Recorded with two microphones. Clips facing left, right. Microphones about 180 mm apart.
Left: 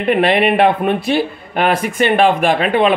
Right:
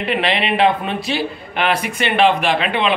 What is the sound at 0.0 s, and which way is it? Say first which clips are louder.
A man's voice: left 6 dB; 50° left (ahead or behind).